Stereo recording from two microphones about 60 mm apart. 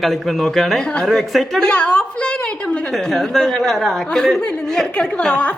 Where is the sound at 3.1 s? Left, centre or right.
Centre.